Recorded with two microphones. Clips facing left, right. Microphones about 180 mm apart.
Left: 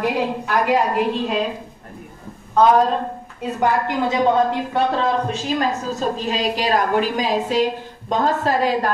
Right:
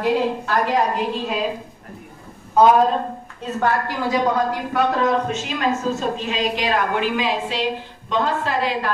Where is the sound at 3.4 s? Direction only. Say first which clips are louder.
Left 2 dB; 20° left (ahead or behind).